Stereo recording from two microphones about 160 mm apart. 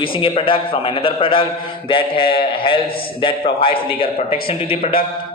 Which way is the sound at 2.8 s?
65° left (ahead or behind).